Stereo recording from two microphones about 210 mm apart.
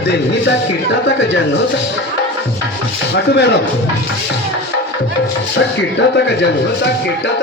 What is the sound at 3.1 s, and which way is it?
Speech, 55° left (ahead or behind).